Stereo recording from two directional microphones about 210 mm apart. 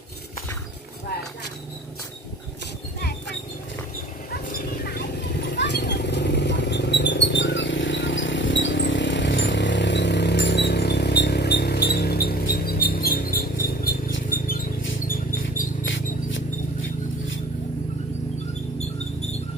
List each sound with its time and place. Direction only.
3.0 s dog: 50° left (ahead or behind)
4.3 s vehicle: 45° left (ahead or behind)
15.0 s rodents: 40° left (ahead or behind)
15.8 s a sound: 65° left (ahead or behind)